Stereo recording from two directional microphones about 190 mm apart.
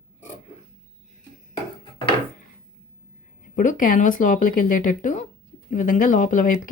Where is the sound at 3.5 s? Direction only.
45° left (ahead or behind).